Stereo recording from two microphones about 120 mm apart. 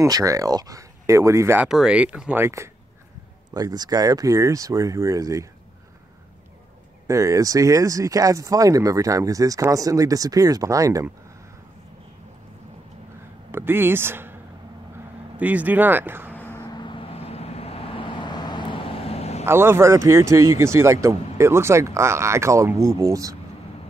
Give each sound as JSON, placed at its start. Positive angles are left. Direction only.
{"t": 0.0, "sound": "speech", "side_deg": -25}
{"t": 1.7, "sound": "speech", "side_deg": -5}
{"t": 2.4, "sound": "speech", "side_deg": -25}
{"t": 7.1, "sound": "speech", "side_deg": -25}
{"t": 13.5, "sound": "speech", "side_deg": -20}
{"t": 15.3, "sound": "speech", "side_deg": -15}
{"t": 16.3, "sound": "vehicle", "side_deg": 15}
{"t": 16.6, "sound": "vehicle", "side_deg": 40}
{"t": 19.4, "sound": "speech", "side_deg": -20}